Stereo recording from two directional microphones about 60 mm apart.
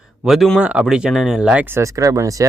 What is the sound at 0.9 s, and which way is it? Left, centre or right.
Speech, centre.